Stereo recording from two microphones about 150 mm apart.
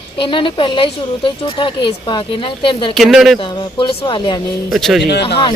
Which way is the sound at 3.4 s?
35° left (ahead or behind).